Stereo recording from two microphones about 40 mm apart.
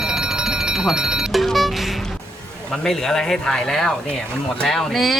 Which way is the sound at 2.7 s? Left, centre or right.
Centre.